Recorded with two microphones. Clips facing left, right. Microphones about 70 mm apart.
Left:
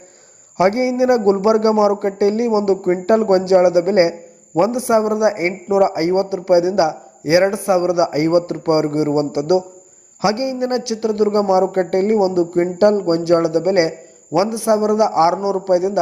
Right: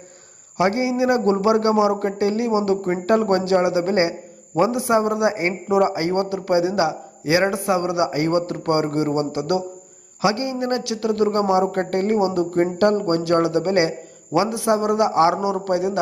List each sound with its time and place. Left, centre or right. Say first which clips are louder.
0.5 s a man's voice: left 4 dB; left
12.1 s a man's voice: left 2 dB; centre